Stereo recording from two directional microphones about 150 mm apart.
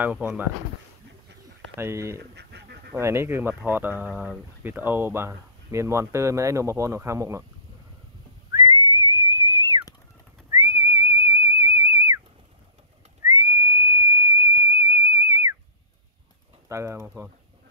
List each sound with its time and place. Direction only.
0.0 s speech: 10° right (ahead or behind)
1.8 s speech: 15° right (ahead or behind)
2.3 s duck: 90° right
2.9 s speech: 20° right (ahead or behind)
8.5 s whistling: 25° right (ahead or behind)
13.2 s whistle: 25° right (ahead or behind)
16.6 s speech: 20° right (ahead or behind)